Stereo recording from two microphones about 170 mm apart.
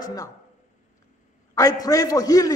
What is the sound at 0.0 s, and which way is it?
Speech, 20° left (ahead or behind).